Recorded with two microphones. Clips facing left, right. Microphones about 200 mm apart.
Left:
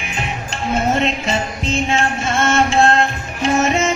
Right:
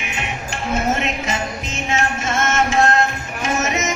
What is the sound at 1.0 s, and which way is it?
Music, 30° left (ahead or behind).